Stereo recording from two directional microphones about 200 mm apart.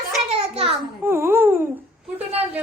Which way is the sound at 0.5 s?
30° right (ahead or behind).